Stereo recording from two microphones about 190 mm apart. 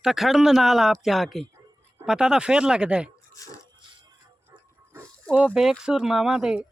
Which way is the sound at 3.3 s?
15° left (ahead or behind).